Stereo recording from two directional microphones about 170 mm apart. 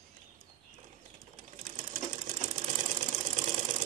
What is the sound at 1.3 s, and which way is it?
Sewing machine, 50° right (ahead or behind).